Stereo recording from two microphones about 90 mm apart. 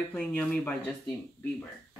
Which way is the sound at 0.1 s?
20° left (ahead or behind).